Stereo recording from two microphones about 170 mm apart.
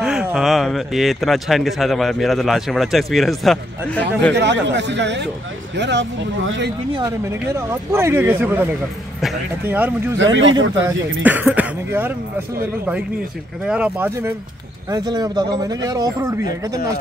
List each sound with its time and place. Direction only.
0.0 s speech: 5° right (ahead or behind)
4.3 s speech: 90° right
6.9 s speech: 20° right (ahead or behind)
9.7 s speech: 10° right (ahead or behind)
10.1 s speech: 90° right
10.9 s speech: 10° right (ahead or behind)
13.7 s speech: 10° right (ahead or behind)
14.9 s speech: 25° right (ahead or behind)